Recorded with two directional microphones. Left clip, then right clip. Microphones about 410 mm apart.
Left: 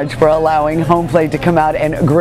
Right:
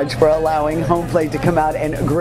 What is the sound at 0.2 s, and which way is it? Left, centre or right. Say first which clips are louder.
Speech: left 4 dB; left.